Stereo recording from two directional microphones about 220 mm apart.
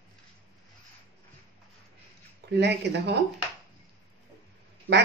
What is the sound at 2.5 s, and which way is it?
Speech, 50° right (ahead or behind).